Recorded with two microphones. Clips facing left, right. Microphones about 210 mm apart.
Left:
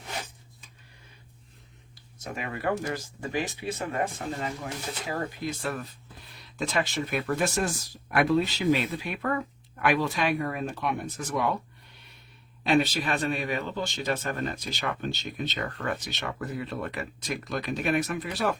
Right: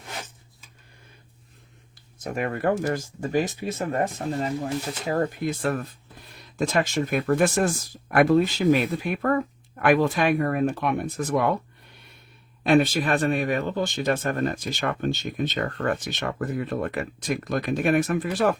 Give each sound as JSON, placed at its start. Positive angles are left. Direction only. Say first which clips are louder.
{"t": 2.1, "sound": "speech", "louder": "right 7 dB", "side_deg": -50}
{"t": 12.6, "sound": "speech", "louder": "right 5 dB", "side_deg": -50}